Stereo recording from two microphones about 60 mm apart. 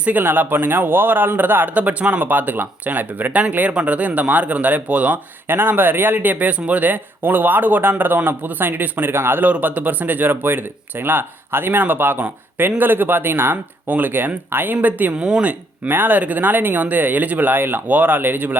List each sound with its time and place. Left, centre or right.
0.0 s speech: right
15.1 s speech: centre
15.9 s speech: right